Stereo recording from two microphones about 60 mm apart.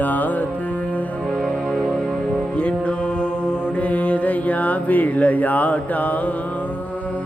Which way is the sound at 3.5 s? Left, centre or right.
Left.